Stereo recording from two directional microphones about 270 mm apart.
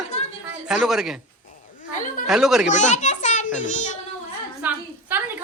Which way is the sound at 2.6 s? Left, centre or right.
Left.